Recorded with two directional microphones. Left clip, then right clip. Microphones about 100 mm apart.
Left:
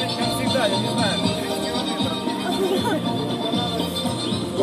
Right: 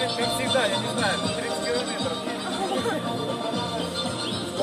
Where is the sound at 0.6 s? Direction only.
15° right (ahead or behind).